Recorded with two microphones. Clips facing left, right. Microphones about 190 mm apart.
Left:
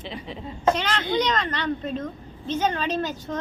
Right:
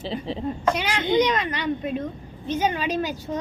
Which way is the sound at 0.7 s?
10° right (ahead or behind).